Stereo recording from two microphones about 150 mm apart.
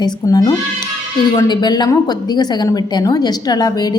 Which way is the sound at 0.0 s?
25° left (ahead or behind).